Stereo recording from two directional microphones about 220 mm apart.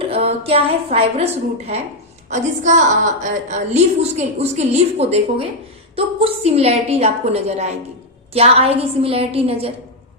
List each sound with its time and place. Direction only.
0.0 s a woman's voice: 25° right (ahead or behind)